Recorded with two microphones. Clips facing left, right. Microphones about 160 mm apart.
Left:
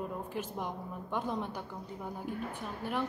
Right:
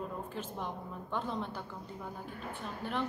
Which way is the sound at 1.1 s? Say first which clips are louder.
Left 2 dB; 10° left (ahead or behind).